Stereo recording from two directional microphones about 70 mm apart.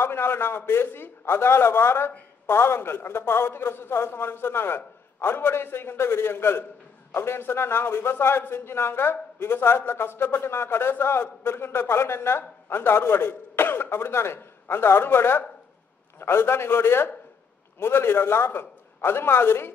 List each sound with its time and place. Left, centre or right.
0.0 s a man's voice: left